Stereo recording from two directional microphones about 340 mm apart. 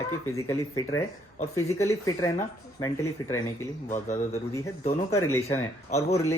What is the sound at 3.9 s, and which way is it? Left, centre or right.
Speech, left.